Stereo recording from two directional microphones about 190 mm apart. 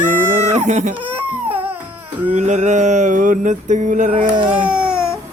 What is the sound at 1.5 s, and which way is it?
Music, 10° right (ahead or behind).